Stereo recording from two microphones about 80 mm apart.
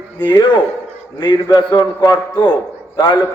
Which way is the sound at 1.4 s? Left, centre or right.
Left.